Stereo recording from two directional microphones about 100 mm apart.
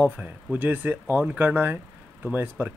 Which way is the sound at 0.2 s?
20° right (ahead or behind).